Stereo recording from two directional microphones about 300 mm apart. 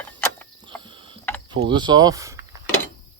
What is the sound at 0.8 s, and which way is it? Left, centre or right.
Mechanisms, centre.